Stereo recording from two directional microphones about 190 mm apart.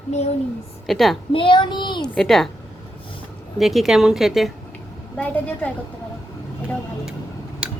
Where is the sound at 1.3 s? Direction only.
25° left (ahead or behind).